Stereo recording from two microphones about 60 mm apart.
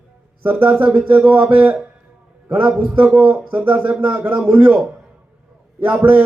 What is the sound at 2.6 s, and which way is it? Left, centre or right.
Speech, centre.